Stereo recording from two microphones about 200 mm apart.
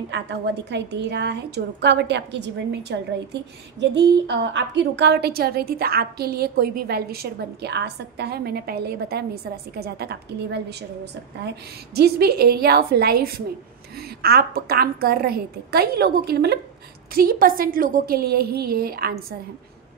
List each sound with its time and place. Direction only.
0.1 s a woman's voice: 60° right (ahead or behind)